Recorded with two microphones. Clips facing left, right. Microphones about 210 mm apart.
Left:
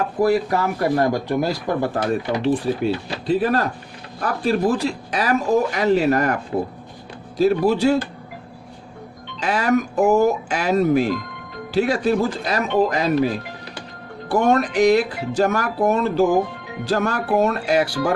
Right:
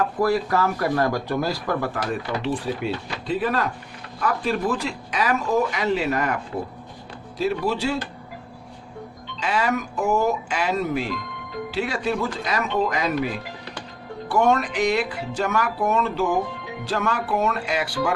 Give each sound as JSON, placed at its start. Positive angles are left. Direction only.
{"t": 0.2, "sound": "speech", "side_deg": 20}
{"t": 9.4, "sound": "speech", "side_deg": 45}